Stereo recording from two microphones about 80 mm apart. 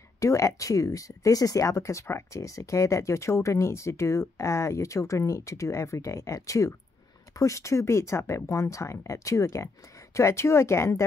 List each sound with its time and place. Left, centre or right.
0.2 s speech: left